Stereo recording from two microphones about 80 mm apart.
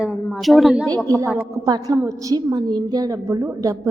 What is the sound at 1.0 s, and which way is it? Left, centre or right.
Speech, right.